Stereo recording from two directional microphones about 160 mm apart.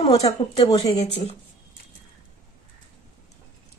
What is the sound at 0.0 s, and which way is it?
Speech, 20° left (ahead or behind).